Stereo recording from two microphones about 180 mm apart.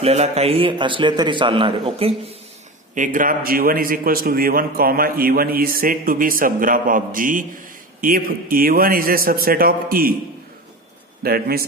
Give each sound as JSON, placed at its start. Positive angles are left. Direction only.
{"t": 0.0, "sound": "a man's voice", "side_deg": -35}
{"t": 2.9, "sound": "a man's voice", "side_deg": -45}
{"t": 11.2, "sound": "a man's voice", "side_deg": -55}